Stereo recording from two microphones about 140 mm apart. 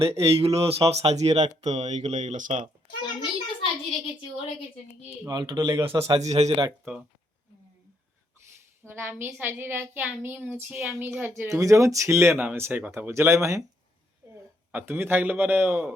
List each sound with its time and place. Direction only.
0.0 s speech: 45° right (ahead or behind); by 2.6 s 60° right (ahead or behind)
3.6 s a woman's voice: 40° left (ahead or behind)
5.3 s a man's voice: 30° right (ahead or behind)
6.2 s speech: 50° right (ahead or behind)
8.8 s a woman's voice: 15° right (ahead or behind)
14.7 s a woman's voice: 15° right (ahead or behind)